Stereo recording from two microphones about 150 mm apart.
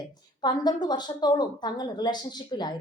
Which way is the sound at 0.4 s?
30° left (ahead or behind).